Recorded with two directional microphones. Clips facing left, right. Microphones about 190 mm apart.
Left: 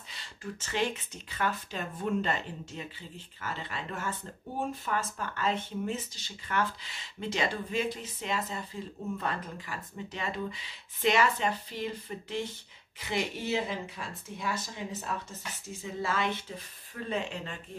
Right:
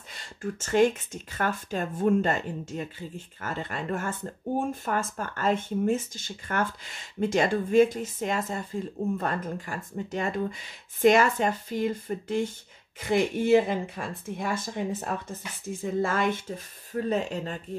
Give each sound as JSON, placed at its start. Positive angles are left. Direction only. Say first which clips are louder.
{"t": 0.1, "sound": "speech", "louder": "right 7 dB", "side_deg": -50}